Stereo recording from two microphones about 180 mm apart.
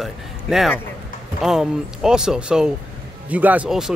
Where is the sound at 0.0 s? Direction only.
Centre (ahead or behind).